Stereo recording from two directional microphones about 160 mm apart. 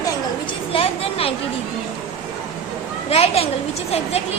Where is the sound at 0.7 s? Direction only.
35° left (ahead or behind).